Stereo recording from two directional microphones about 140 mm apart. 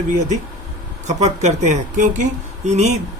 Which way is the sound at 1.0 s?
55° right (ahead or behind).